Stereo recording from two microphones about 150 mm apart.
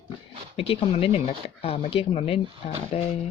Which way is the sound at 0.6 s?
40° left (ahead or behind).